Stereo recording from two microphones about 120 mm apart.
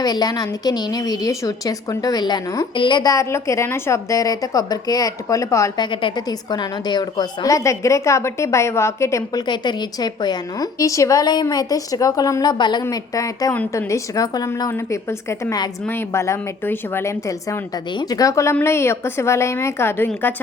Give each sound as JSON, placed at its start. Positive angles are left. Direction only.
{"t": 0.0, "sound": "a woman's voice", "side_deg": 35}
{"t": 5.8, "sound": "a woman's voice", "side_deg": 45}
{"t": 9.5, "sound": "a woman's voice", "side_deg": 35}
{"t": 12.8, "sound": "a woman's voice", "side_deg": 30}